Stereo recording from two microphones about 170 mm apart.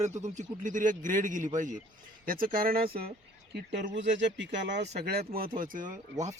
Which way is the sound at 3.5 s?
75° right (ahead or behind).